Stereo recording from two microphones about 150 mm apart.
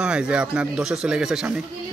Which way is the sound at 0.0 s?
5° right (ahead or behind).